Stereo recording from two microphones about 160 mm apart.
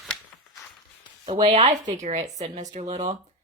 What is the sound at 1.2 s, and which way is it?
Speech, 35° right (ahead or behind).